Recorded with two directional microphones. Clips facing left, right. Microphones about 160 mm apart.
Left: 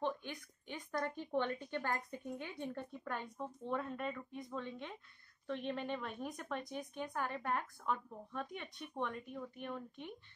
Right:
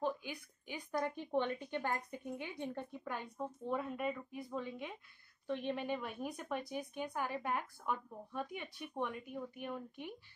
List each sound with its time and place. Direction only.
0.0 s speech: 5° right (ahead or behind)